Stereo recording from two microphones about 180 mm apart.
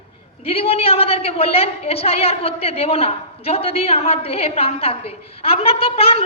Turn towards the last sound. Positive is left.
turn(degrees=30)  # may be behind; listen again after turning